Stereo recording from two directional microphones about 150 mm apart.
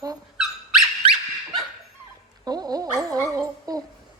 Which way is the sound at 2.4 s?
25° right (ahead or behind).